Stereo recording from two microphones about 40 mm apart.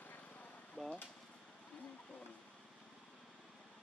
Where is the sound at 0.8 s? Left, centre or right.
Left.